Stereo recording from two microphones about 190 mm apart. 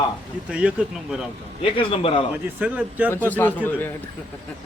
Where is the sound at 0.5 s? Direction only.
5° right (ahead or behind).